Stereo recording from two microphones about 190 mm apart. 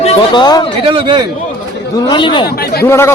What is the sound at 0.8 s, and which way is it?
Speech, 25° right (ahead or behind).